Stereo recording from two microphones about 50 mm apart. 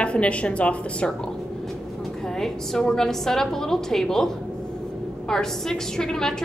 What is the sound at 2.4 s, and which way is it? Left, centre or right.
A woman's voice, centre.